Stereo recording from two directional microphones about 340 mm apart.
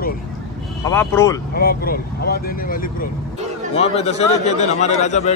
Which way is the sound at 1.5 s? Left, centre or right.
Left.